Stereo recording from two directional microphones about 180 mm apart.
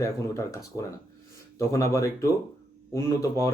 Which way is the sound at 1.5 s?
15° left (ahead or behind).